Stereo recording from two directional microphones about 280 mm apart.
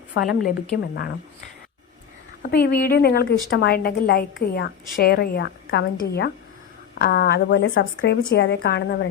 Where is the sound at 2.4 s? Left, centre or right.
Left.